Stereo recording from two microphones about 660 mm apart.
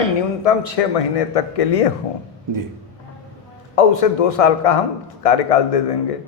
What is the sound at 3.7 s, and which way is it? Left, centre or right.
A man's voice, left.